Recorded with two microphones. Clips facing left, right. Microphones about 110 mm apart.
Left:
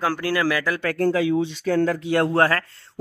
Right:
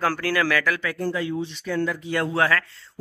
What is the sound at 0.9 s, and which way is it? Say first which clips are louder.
Speech: left 6 dB; 80° left.